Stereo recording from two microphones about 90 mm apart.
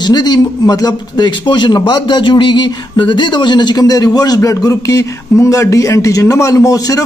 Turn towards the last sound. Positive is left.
turn(degrees=40)  # may be behind; listen again after turning